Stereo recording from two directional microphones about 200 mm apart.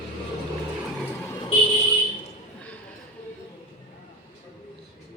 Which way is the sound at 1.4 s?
30° left (ahead or behind).